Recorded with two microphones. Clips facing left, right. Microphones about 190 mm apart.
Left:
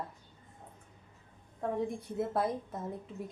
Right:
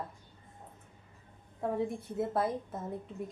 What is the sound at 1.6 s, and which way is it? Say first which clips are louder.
Speech: right 1 dB; 5° right (ahead or behind).